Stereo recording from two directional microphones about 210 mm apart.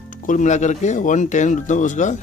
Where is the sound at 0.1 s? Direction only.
40° left (ahead or behind).